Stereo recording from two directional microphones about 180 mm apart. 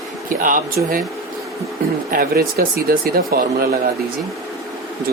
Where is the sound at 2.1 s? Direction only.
55° right (ahead or behind).